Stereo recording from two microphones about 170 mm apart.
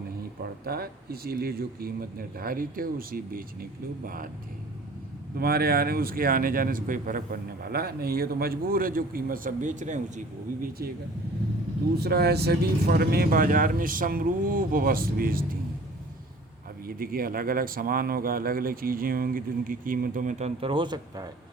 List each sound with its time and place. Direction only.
0.4 s speech: 65° right (ahead or behind)
5.4 s speech: 65° right (ahead or behind)
11.9 s speech: 70° right (ahead or behind)
16.8 s speech: 60° right (ahead or behind)
20.6 s speech: 30° right (ahead or behind)